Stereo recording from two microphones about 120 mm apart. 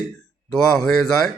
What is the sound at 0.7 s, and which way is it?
Speech, 5° left (ahead or behind).